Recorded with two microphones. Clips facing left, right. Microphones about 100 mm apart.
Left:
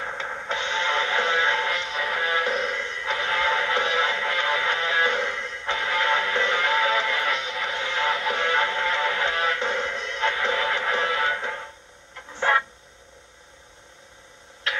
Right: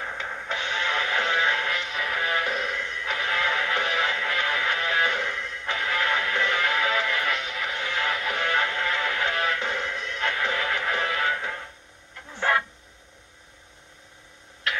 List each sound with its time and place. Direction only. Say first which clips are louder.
0.0 s music: left 2 dB; 25° left (ahead or behind)